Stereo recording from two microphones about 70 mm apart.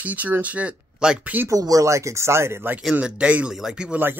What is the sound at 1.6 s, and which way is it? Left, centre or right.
Speech, right.